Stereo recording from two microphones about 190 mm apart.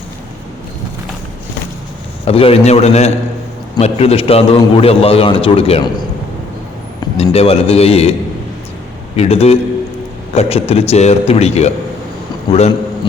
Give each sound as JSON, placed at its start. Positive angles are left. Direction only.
{"t": 2.2, "sound": "a man's voice", "side_deg": 30}
{"t": 7.2, "sound": "a man's voice", "side_deg": 30}
{"t": 9.1, "sound": "a man's voice", "side_deg": 35}